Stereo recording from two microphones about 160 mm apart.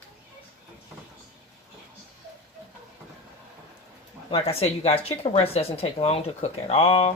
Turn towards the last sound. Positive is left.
turn(degrees=35)  # may be behind; listen again after turning